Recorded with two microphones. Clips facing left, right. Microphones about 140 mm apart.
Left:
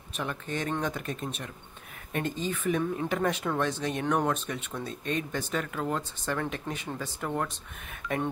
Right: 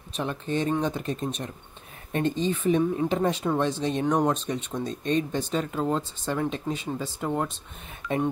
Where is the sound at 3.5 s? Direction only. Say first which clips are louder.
Right 4 dB; 15° right (ahead or behind).